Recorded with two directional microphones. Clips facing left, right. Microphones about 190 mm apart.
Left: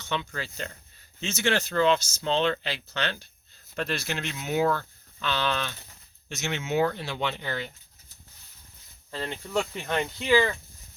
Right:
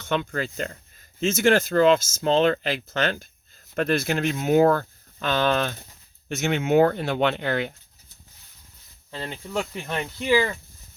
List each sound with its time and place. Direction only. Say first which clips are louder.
0.0 s speech: right 6 dB; 55° right (ahead or behind)
9.0 s cricket: even; 5° right (ahead or behind)
10.2 s speech: right 1 dB; 10° right (ahead or behind)